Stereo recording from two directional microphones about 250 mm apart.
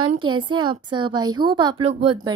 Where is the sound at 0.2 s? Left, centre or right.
Centre.